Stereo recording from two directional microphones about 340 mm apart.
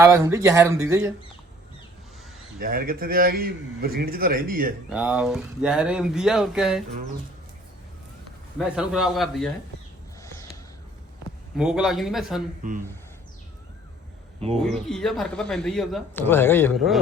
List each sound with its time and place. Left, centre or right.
0.0 s speech: centre
2.6 s a man's voice: right
4.9 s speech: centre
8.5 s speech: centre
11.5 s speech: centre
12.6 s a man's voice: right
14.6 s speech: centre